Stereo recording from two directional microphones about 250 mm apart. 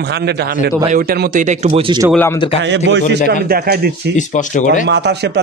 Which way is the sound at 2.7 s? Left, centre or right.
Right.